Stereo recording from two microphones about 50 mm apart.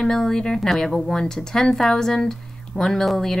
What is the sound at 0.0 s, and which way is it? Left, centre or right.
A woman's voice, centre.